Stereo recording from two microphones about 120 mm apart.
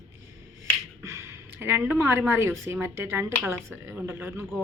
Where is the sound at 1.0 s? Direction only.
25° right (ahead or behind).